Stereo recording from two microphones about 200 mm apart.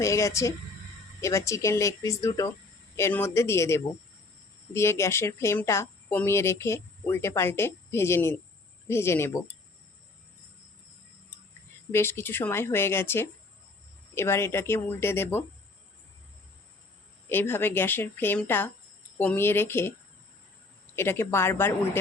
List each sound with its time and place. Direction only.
0.0 s speech: 15° left (ahead or behind)
11.9 s speech: 10° left (ahead or behind)
17.2 s speech: 10° left (ahead or behind)
20.9 s speech: 10° left (ahead or behind)